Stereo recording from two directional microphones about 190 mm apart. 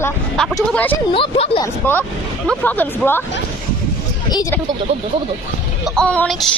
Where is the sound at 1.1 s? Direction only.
25° left (ahead or behind).